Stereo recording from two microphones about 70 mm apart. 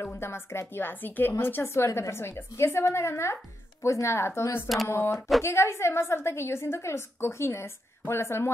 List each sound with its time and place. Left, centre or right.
0.0 s a woman's voice: left